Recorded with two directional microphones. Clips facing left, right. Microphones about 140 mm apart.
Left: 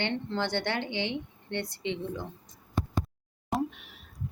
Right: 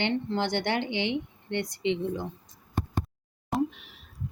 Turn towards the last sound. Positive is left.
turn(degrees=0)  # may be behind; listen again after turning